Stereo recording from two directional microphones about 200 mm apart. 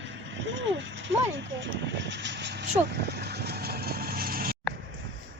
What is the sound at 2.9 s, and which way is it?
Vehicle, 55° right (ahead or behind).